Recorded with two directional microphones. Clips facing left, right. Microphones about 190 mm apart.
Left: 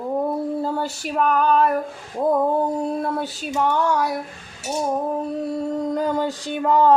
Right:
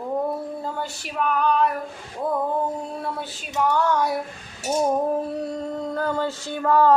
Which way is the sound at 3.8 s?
15° left (ahead or behind).